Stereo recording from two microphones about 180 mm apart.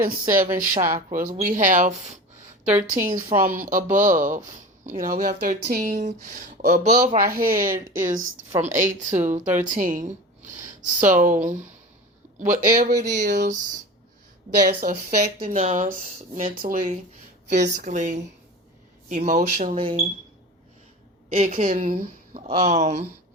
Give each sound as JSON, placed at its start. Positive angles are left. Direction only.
{"t": 0.0, "sound": "a woman's voice", "side_deg": -50}
{"t": 6.8, "sound": "speech", "side_deg": -40}
{"t": 7.3, "sound": "a woman's voice", "side_deg": -50}
{"t": 14.6, "sound": "a woman's voice", "side_deg": -55}
{"t": 15.4, "sound": "speech", "side_deg": -45}
{"t": 16.6, "sound": "a woman's voice", "side_deg": -50}
{"t": 19.8, "sound": "speech", "side_deg": -30}
{"t": 21.3, "sound": "speech", "side_deg": -40}